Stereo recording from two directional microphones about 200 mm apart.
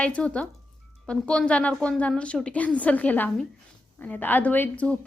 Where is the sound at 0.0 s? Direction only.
5° left (ahead or behind).